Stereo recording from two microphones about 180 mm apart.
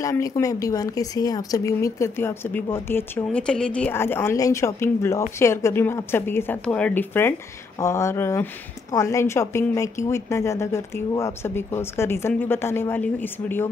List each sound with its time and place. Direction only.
0.0 s a woman's voice: 20° left (ahead or behind)